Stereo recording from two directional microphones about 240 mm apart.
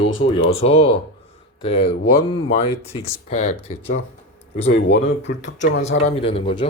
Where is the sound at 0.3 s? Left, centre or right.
Left.